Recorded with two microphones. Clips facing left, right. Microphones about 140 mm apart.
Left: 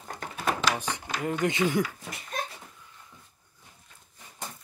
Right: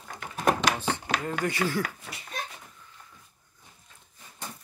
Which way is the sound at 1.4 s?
20° left (ahead or behind).